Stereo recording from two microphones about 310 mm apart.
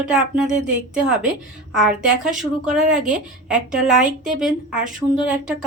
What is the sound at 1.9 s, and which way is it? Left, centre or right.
Speech, right.